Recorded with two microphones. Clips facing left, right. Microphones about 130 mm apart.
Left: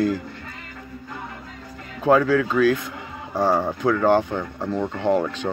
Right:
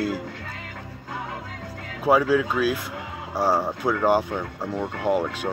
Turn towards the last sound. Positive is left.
turn(degrees=-10)  # may be behind; listen again after turning